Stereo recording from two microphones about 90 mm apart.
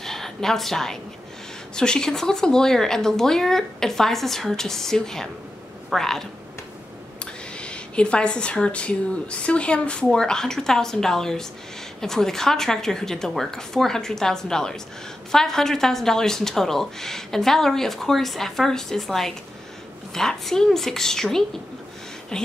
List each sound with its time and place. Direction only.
0.0 s a sound: 5° left (ahead or behind)
1.8 s a woman's voice: 10° left (ahead or behind)
7.5 s a woman's voice: 10° left (ahead or behind)